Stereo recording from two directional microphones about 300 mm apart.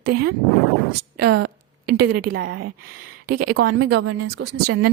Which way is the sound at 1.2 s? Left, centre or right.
Right.